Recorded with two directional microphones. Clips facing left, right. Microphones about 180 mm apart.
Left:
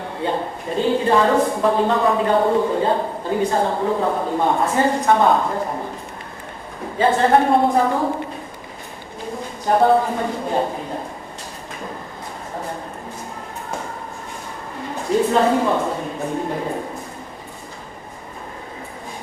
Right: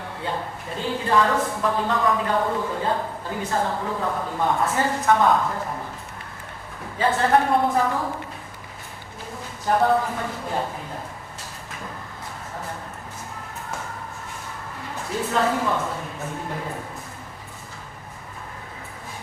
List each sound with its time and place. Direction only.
0.2 s a woman's voice: 25° left (ahead or behind)
7.0 s a woman's voice: 25° left (ahead or behind)
9.6 s a woman's voice: 25° left (ahead or behind)
15.1 s a woman's voice: 30° left (ahead or behind)